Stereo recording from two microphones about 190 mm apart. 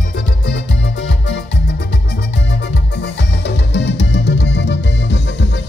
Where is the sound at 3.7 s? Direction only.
65° left (ahead or behind).